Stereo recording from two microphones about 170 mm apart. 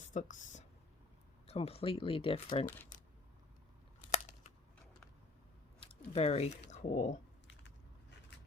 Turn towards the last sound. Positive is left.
turn(degrees=45)  # may be behind; listen again after turning